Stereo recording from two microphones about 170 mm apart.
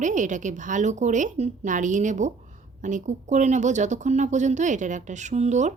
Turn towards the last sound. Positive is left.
turn(degrees=-40)  # may be behind; listen again after turning